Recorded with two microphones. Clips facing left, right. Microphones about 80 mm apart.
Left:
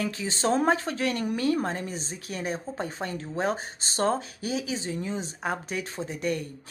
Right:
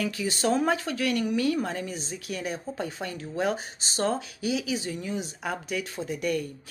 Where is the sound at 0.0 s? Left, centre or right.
Left.